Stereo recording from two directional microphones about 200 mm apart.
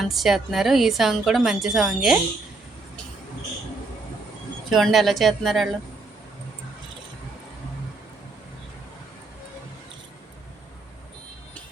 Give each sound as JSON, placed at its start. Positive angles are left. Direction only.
{"t": 0.0, "sound": "a woman's voice", "side_deg": 0}
{"t": 4.7, "sound": "a woman's voice", "side_deg": 0}